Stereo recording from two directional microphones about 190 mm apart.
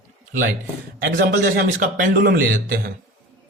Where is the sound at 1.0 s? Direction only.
50° right (ahead or behind).